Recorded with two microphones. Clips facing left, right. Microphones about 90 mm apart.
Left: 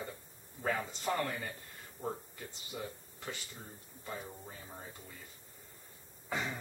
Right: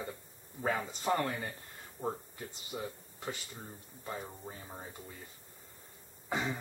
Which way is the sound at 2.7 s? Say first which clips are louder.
Right 2 dB; 20° right (ahead or behind).